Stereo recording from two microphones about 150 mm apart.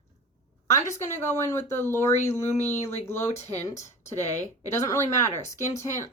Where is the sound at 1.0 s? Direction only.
15° left (ahead or behind).